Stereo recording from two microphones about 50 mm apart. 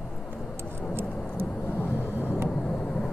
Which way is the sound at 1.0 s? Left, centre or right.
Left.